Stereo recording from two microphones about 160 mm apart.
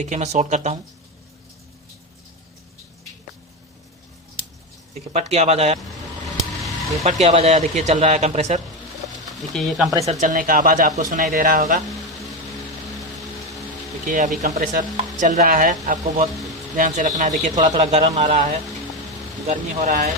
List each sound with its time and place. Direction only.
0.0 s speech: 45° right (ahead or behind)
4.9 s speech: 40° right (ahead or behind)
7.0 s speech: 45° right (ahead or behind)
9.5 s speech: centre (ahead or behind)
10.1 s speech: 50° right (ahead or behind)
14.1 s speech: 55° right (ahead or behind)